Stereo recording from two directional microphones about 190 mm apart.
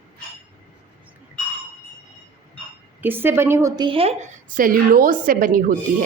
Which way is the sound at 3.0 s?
10° right (ahead or behind).